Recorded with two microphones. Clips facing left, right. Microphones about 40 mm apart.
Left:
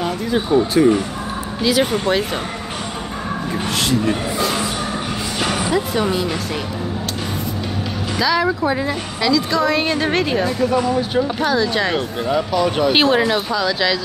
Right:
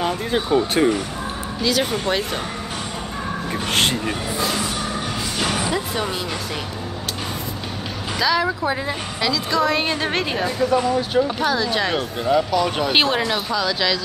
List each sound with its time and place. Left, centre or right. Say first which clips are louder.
1.6 s speech: left 4 dB; centre
3.7 s speech: even; right
5.4 s music: left 4 dB; centre
8.2 s a woman's voice: left 2 dB; centre